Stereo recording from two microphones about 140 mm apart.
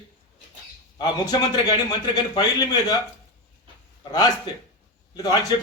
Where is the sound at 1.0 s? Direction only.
30° left (ahead or behind).